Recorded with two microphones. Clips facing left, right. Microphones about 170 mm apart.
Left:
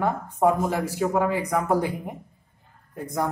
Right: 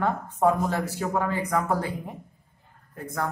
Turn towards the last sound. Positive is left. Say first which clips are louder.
# left 3 dB
turn(degrees=15)  # may be behind; listen again after turning